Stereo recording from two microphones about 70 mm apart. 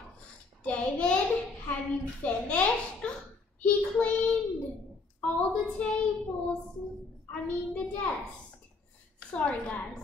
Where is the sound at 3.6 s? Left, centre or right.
Centre.